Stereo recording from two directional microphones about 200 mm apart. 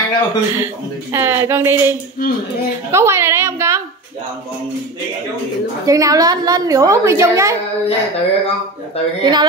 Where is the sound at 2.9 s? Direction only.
15° right (ahead or behind).